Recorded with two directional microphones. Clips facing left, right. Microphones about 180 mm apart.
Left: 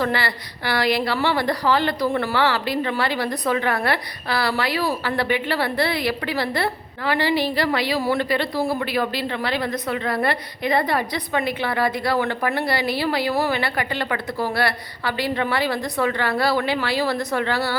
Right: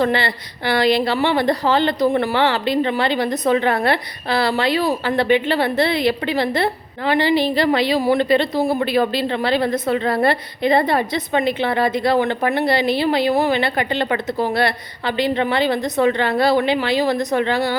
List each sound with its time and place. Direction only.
0.0 s a woman's voice: 25° right (ahead or behind)